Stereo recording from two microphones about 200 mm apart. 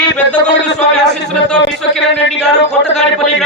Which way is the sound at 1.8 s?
Centre (ahead or behind).